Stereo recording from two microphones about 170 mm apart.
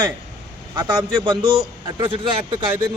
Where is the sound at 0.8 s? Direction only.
30° right (ahead or behind).